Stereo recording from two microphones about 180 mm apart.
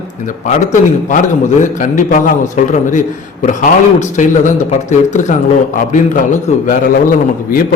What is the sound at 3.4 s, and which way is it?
A man's voice, 45° left (ahead or behind).